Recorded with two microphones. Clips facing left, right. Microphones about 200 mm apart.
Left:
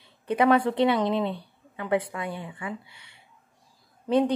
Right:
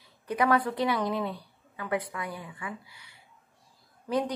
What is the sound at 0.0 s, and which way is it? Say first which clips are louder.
A woman's voice: left 5 dB; 25° left (ahead or behind).